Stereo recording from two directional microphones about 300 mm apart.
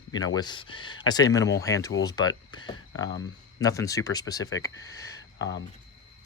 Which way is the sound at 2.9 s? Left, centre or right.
Left.